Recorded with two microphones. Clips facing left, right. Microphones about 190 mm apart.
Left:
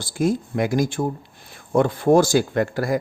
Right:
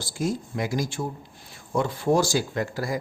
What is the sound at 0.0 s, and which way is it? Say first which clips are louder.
Speech: left 6 dB; 55° left (ahead or behind).